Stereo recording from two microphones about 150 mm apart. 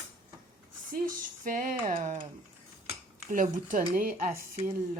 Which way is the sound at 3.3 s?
60° right (ahead or behind).